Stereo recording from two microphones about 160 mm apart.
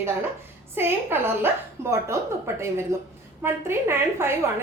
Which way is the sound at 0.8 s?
15° right (ahead or behind).